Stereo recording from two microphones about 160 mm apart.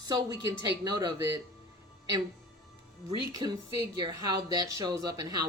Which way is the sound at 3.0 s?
25° right (ahead or behind).